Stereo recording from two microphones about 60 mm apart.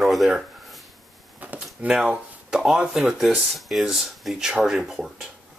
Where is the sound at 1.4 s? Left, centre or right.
Right.